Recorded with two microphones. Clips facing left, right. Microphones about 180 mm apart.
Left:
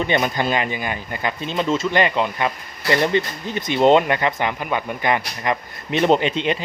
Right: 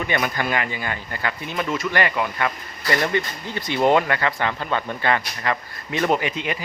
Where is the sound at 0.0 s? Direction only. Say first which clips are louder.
Left 4 dB; 25° left (ahead or behind).